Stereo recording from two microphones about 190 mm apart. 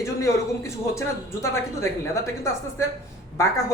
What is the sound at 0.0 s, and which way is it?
A man's voice, 15° left (ahead or behind).